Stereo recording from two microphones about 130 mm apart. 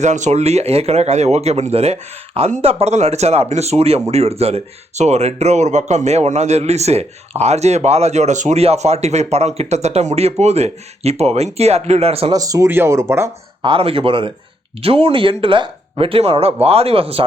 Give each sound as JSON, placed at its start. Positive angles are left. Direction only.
{"t": 0.0, "sound": "speech", "side_deg": -65}
{"t": 12.3, "sound": "speech", "side_deg": -25}
{"t": 13.6, "sound": "speech", "side_deg": -45}